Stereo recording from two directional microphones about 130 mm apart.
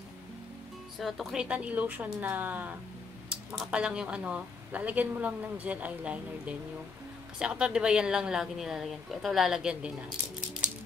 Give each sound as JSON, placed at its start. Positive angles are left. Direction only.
{"t": 0.9, "sound": "speech", "side_deg": 0}